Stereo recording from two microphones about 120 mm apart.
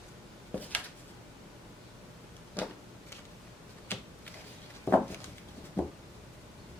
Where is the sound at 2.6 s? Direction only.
15° left (ahead or behind).